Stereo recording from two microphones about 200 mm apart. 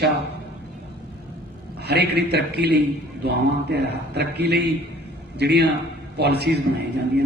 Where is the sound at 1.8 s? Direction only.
55° right (ahead or behind).